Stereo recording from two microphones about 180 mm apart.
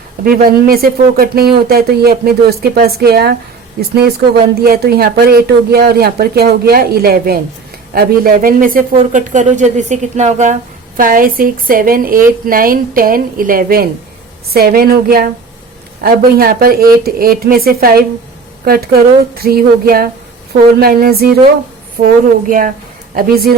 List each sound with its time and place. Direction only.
0.3 s speech: 55° right (ahead or behind)